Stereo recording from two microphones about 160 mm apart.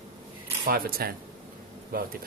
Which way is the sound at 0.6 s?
70° right (ahead or behind).